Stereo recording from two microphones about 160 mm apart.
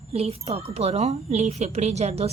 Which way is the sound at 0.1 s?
40° right (ahead or behind).